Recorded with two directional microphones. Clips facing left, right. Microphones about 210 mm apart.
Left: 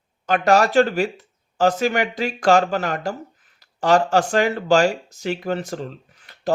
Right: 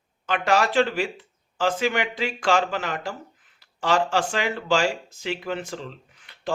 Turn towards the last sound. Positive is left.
turn(degrees=40)  # may be behind; listen again after turning